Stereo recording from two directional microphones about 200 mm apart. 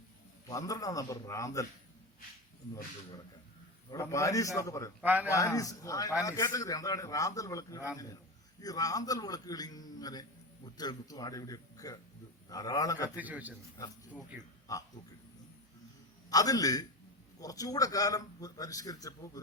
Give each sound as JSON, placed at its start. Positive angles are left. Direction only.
{"t": 0.4, "sound": "a man's voice", "side_deg": 15}
{"t": 3.8, "sound": "a man's voice", "side_deg": 15}
{"t": 4.9, "sound": "a man's voice", "side_deg": -10}
{"t": 5.3, "sound": "a man's voice", "side_deg": 15}
{"t": 13.1, "sound": "a man's voice", "side_deg": -10}
{"t": 14.7, "sound": "a man's voice", "side_deg": 15}
{"t": 16.3, "sound": "a man's voice", "side_deg": 20}